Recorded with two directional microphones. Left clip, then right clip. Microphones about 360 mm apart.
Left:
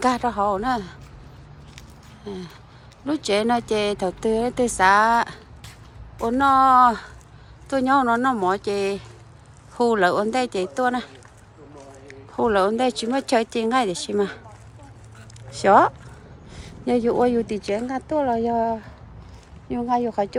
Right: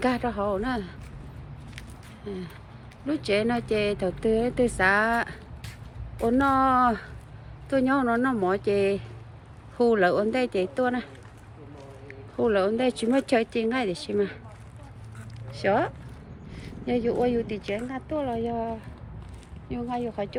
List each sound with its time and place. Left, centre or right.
0.0 s speech: centre
2.2 s speech: centre
15.4 s speech: centre
17.7 s speech: left
19.7 s speech: centre